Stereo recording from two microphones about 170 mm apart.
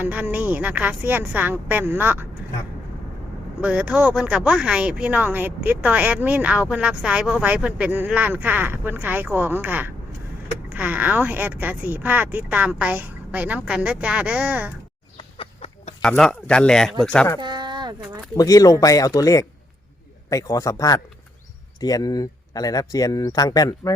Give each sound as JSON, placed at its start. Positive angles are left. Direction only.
{"t": 0.0, "sound": "speech", "side_deg": -10}
{"t": 3.6, "sound": "speech", "side_deg": -5}
{"t": 15.2, "sound": "chicken", "side_deg": 35}
{"t": 16.0, "sound": "speech", "side_deg": 5}
{"t": 17.4, "sound": "a sound", "side_deg": -25}
{"t": 18.3, "sound": "speech", "side_deg": 20}